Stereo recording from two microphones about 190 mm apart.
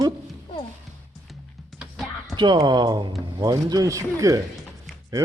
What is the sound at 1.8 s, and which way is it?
Music, centre (ahead or behind).